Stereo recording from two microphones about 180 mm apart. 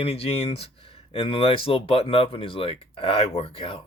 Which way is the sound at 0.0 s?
30° left (ahead or behind).